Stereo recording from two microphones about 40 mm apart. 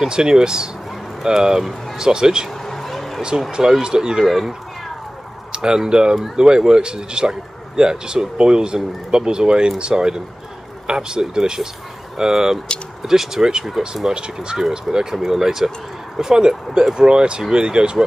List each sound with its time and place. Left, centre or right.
0.0 s speech: centre
2.6 s a sound: centre
3.2 s speech: centre
5.5 s a sound: right
5.9 s speech: right
14.1 s speech: right